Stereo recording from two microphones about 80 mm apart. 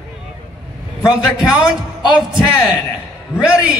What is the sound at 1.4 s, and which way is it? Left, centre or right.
Speech, centre.